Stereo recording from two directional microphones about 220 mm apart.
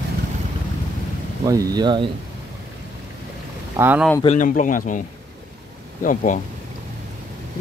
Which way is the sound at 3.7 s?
10° right (ahead or behind).